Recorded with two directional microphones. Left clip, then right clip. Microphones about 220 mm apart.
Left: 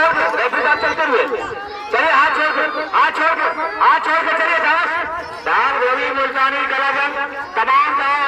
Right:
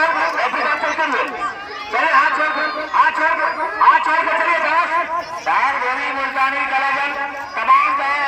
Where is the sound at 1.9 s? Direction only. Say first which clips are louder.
Left 1 dB; 25° left (ahead or behind).